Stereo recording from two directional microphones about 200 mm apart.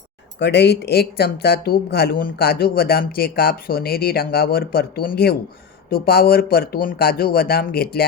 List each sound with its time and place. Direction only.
0.3 s speech: 55° left (ahead or behind)